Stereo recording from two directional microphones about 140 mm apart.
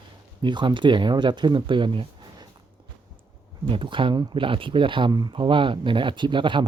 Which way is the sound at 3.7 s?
35° right (ahead or behind).